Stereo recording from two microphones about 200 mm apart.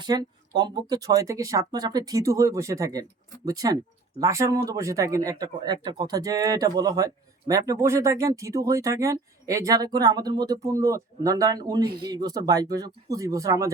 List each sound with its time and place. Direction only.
0.0 s speech: 20° right (ahead or behind)